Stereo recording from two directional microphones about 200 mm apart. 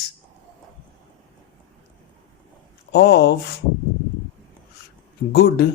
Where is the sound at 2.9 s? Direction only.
55° left (ahead or behind).